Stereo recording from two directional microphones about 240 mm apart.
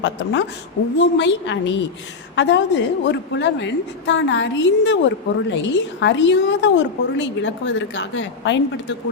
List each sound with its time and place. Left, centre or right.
0.9 s a woman's voice: left